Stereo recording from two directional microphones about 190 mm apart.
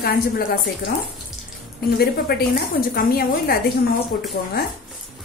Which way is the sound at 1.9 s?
55° left (ahead or behind).